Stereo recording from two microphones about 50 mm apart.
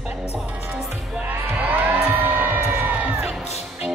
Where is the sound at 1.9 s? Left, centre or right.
Right.